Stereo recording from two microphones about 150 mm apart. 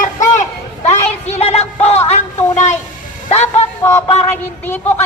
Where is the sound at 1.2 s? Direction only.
45° left (ahead or behind).